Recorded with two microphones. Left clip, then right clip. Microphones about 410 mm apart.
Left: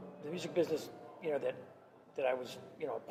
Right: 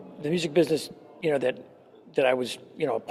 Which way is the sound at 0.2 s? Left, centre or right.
Right.